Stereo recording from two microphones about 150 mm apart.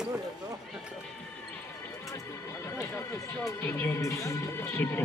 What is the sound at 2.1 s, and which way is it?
Speech, 20° left (ahead or behind).